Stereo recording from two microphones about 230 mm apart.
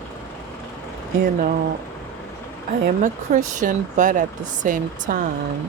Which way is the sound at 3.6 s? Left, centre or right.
Right.